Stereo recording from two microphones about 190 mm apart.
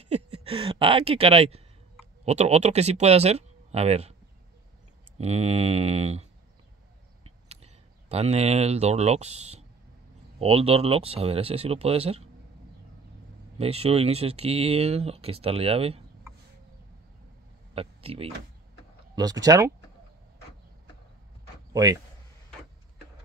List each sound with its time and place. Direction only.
0.0 s speech: 35° right (ahead or behind)
5.1 s speech: 35° right (ahead or behind)
7.4 s speech: 35° right (ahead or behind)
13.6 s speech: 30° right (ahead or behind)
17.7 s speech: 30° right (ahead or behind)
19.1 s speech: 20° right (ahead or behind)
21.7 s speech: 20° right (ahead or behind)